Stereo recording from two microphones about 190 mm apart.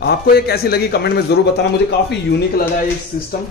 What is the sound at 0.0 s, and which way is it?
A man's voice, 55° left (ahead or behind).